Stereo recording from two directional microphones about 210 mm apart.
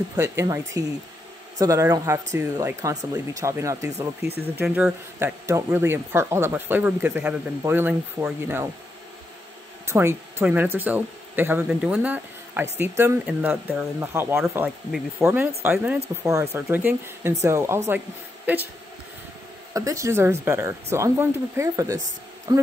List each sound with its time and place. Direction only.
0.1 s speech: 15° right (ahead or behind)
1.6 s speech: 15° right (ahead or behind)
9.8 s speech: 10° right (ahead or behind)
19.7 s speech: 15° right (ahead or behind)